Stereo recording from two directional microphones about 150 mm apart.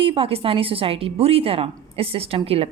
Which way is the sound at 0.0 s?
35° right (ahead or behind).